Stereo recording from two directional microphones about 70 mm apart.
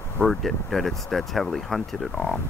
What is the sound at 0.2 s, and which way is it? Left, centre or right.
Speech, centre.